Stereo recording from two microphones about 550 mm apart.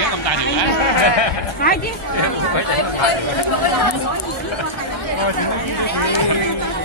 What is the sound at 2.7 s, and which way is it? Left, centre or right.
Speech, left.